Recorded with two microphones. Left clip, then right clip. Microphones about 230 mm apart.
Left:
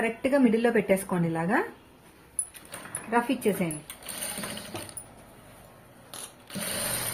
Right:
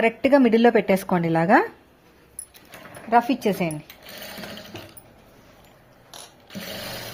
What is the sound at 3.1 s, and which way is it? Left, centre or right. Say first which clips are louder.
Speech: right 6 dB; right.